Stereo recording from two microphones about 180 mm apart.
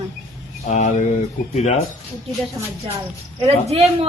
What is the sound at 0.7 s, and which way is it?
A man's voice, 40° left (ahead or behind).